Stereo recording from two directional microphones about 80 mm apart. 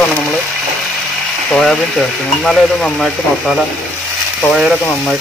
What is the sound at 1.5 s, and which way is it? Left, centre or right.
Speech, centre.